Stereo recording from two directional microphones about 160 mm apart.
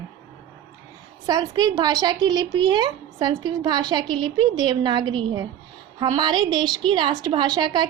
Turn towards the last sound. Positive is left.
turn(degrees=-30)  # may be behind; listen again after turning